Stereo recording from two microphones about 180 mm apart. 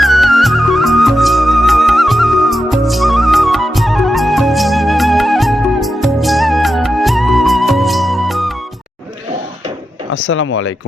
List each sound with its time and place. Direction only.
0.0 s music: centre (ahead or behind)
10.1 s speech: 90° left